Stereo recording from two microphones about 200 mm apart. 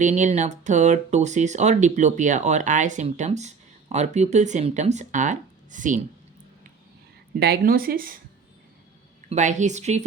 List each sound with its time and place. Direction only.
0.0 s speech: 35° right (ahead or behind)
7.3 s speech: 50° right (ahead or behind)
9.3 s speech: 35° right (ahead or behind)